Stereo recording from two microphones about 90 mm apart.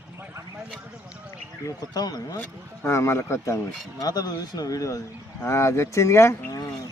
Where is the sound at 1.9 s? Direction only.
45° left (ahead or behind).